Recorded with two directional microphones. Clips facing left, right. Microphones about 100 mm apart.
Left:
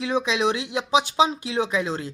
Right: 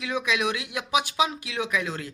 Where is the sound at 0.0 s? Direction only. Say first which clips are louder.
Left 4 dB; 30° left (ahead or behind).